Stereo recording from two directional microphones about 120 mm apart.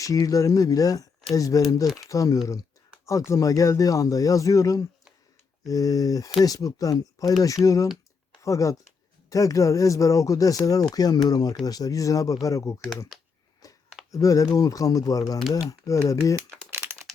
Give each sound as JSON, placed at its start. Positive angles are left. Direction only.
{"t": 0.0, "sound": "speech", "side_deg": 30}
{"t": 13.1, "sound": "speech", "side_deg": -5}
{"t": 13.6, "sound": "a sound", "side_deg": 30}
{"t": 14.1, "sound": "speech", "side_deg": 25}
{"t": 16.7, "sound": "crumpling", "side_deg": -20}